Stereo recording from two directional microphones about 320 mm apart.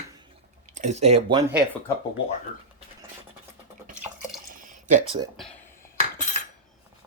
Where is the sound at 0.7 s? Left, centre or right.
Right.